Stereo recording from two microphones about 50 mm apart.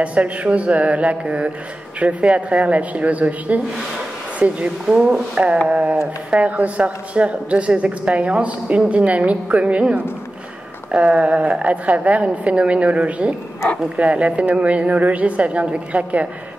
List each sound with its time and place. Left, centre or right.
0.0 s speech: right